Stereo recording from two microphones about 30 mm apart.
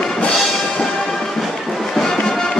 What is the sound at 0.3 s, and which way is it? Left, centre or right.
Music, centre.